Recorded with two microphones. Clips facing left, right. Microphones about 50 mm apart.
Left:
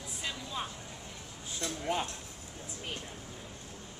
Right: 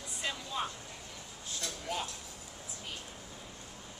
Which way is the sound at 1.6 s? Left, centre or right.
Left.